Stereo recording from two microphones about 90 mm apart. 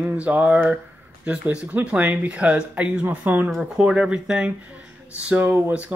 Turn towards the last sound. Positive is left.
turn(degrees=-20)  # may be behind; listen again after turning